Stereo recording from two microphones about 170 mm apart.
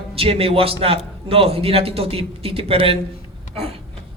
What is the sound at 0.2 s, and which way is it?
A man's voice, 35° right (ahead or behind).